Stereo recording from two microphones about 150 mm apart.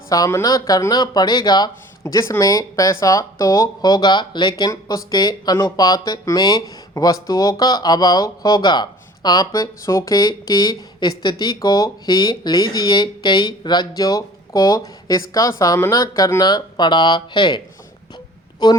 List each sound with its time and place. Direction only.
0.1 s speech: 20° left (ahead or behind)
18.6 s speech: 30° left (ahead or behind)